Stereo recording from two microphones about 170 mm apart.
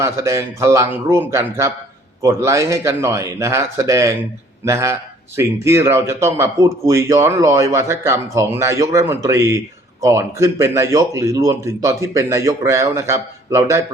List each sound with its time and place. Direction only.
0.0 s a man's voice: 15° right (ahead or behind)